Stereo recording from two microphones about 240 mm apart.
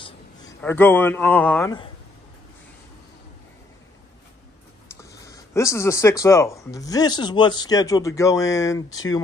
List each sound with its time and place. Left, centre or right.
0.0 s a sound: centre
0.6 s speech: centre
5.1 s speech: centre